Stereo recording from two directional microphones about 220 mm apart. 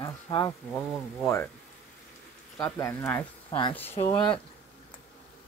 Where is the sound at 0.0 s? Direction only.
15° left (ahead or behind).